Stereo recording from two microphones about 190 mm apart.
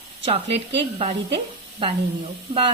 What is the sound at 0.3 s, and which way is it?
Speech, 35° right (ahead or behind).